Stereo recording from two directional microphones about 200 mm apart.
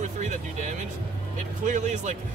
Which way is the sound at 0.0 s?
35° right (ahead or behind).